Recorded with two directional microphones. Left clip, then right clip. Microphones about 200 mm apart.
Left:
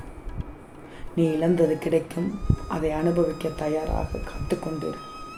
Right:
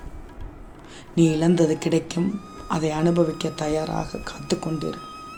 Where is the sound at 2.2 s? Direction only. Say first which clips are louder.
Even; centre (ahead or behind).